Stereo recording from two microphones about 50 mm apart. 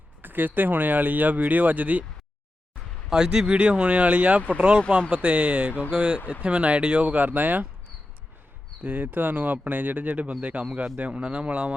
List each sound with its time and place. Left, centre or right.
0.2 s speech: right
3.1 s speech: centre; by 7.7 s right
8.8 s speech: right